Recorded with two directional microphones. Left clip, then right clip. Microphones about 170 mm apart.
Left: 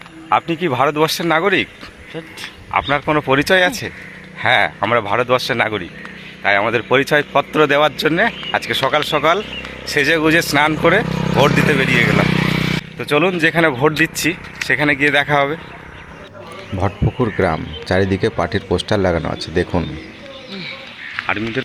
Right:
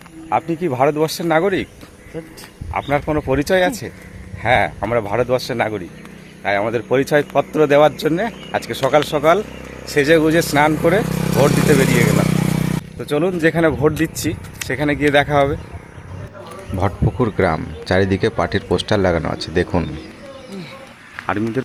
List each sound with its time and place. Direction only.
0.3 s speech: centre (ahead or behind)
2.9 s speech: centre (ahead or behind)
11.0 s vehicle: 20° right (ahead or behind)
11.3 s speech: 5° right (ahead or behind)
11.9 s motorcycle: 90° right
13.0 s speech: 5° right (ahead or behind)
16.7 s speech: centre (ahead or behind)
21.2 s speech: 40° right (ahead or behind)